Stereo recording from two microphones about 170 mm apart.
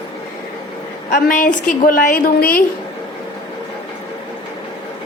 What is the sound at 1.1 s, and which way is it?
A woman's voice, 50° left (ahead or behind).